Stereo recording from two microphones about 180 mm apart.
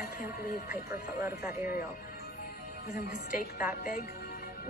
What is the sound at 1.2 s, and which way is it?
Speech, 15° right (ahead or behind).